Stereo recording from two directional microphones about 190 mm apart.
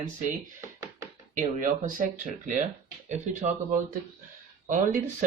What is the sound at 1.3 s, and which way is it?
Speech, 45° right (ahead or behind).